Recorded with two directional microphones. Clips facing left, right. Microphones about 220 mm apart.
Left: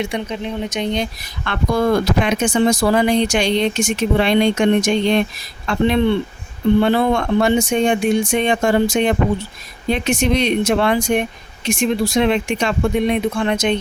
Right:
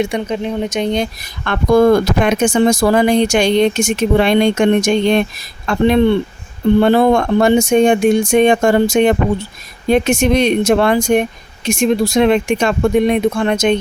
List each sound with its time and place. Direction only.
0.0 s speech: 45° right (ahead or behind)